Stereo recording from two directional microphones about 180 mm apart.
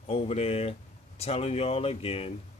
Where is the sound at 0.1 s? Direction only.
35° left (ahead or behind).